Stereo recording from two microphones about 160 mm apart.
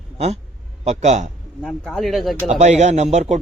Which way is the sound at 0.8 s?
45° right (ahead or behind).